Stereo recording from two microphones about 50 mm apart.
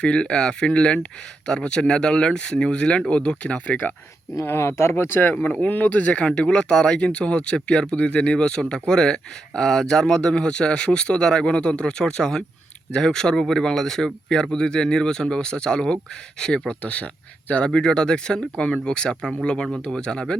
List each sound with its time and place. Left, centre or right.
0.0 s speech: centre
4.4 s speech: left
5.6 s speech: left
17.7 s speech: centre